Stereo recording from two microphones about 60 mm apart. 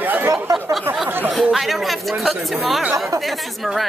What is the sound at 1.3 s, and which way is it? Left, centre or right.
Speech, centre.